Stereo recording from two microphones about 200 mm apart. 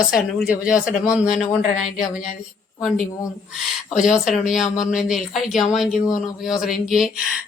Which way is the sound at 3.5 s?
Centre (ahead or behind).